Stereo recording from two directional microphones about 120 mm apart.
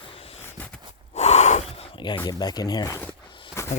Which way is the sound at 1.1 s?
70° left (ahead or behind).